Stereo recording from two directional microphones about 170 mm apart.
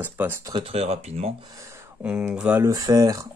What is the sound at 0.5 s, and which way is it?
Speech, 35° right (ahead or behind).